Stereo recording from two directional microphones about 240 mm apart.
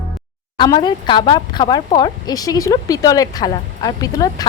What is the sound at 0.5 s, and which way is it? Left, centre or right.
A child's voice, centre.